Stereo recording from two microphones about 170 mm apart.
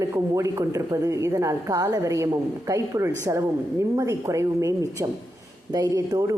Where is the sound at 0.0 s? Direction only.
20° right (ahead or behind).